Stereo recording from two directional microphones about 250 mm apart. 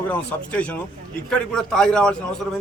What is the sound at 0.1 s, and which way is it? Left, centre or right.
A man's voice, centre.